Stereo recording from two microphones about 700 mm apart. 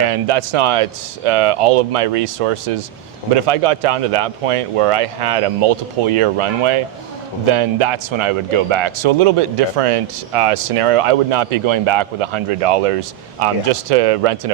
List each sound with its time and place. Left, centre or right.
0.1 s speech: right